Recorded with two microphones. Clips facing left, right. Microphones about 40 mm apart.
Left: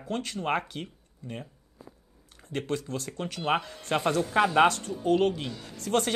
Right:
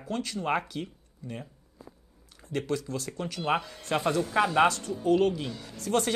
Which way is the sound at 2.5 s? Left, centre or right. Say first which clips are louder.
Right 1 dB; left.